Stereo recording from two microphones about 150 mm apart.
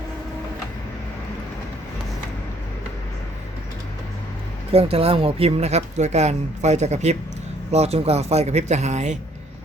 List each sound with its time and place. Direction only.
4.7 s speech: 40° right (ahead or behind)